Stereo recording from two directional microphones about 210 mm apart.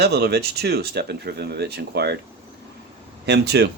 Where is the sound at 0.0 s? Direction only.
50° right (ahead or behind).